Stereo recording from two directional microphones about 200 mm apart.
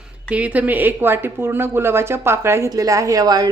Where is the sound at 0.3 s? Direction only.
5° right (ahead or behind).